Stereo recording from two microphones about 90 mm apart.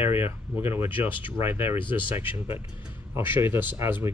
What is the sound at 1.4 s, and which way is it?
Speech, 25° right (ahead or behind).